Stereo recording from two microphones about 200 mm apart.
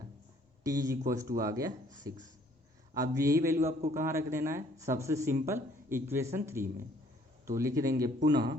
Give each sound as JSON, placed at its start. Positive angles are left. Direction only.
{"t": 0.6, "sound": "speech", "side_deg": -15}